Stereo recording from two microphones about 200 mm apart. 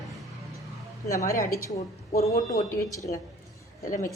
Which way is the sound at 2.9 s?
15° left (ahead or behind).